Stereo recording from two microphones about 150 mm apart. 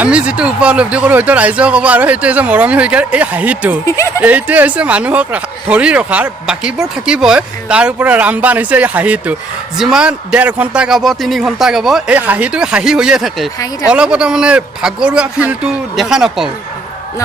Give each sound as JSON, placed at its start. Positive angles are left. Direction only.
{"t": 0.0, "sound": "speech", "side_deg": -10}
{"t": 3.8, "sound": "speech", "side_deg": 20}
{"t": 4.2, "sound": "a man's voice", "side_deg": -10}